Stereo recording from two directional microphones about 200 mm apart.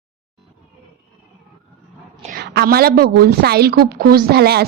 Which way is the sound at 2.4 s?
55° right (ahead or behind).